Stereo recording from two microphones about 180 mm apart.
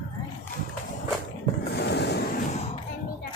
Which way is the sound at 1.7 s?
70° left (ahead or behind).